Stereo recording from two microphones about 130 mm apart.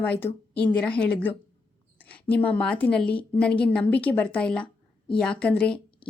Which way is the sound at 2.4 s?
10° left (ahead or behind).